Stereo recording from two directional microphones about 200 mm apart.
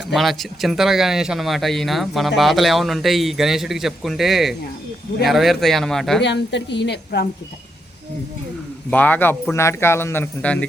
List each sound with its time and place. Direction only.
0.1 s speech: centre (ahead or behind)
6.2 s a woman's voice: 60° left (ahead or behind)
8.9 s speech: 10° left (ahead or behind)